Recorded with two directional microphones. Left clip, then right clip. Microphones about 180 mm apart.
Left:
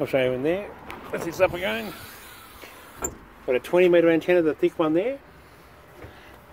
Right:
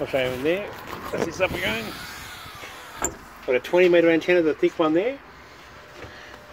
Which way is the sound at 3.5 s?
20° left (ahead or behind).